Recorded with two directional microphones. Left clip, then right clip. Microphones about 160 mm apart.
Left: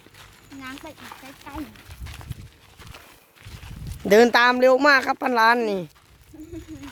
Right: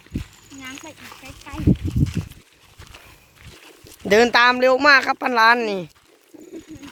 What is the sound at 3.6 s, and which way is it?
Speech, 20° left (ahead or behind).